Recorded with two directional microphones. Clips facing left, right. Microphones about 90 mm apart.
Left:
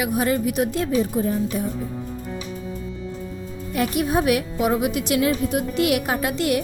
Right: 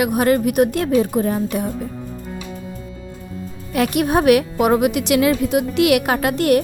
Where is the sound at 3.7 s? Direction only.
75° right (ahead or behind).